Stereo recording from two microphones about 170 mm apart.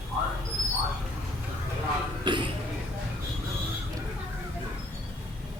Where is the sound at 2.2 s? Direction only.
30° right (ahead or behind).